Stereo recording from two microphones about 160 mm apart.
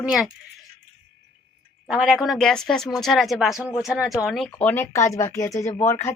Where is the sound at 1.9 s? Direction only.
5° right (ahead or behind).